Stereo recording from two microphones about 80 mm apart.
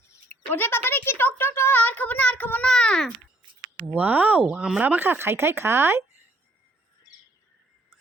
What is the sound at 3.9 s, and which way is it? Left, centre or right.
Speech, right.